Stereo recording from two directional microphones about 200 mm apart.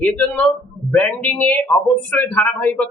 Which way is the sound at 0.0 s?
5° left (ahead or behind).